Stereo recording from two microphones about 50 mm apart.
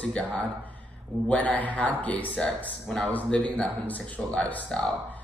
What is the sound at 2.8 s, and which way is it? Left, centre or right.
Speech, centre.